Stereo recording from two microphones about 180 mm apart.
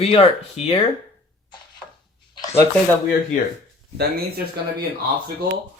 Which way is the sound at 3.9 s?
60° right (ahead or behind).